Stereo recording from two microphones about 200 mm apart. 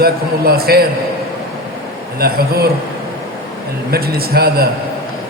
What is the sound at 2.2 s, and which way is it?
Speech, 50° right (ahead or behind).